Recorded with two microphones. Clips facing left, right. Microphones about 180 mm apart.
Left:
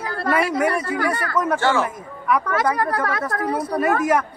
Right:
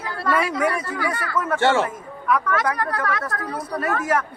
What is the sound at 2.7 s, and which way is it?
Speech, 30° left (ahead or behind).